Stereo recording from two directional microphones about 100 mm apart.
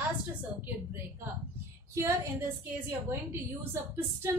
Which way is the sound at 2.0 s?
25° right (ahead or behind).